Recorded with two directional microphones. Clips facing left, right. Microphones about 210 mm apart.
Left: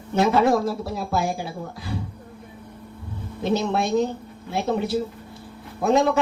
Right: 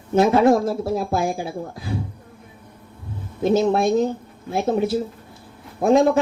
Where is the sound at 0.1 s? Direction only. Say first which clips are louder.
Right 4 dB; 50° right (ahead or behind).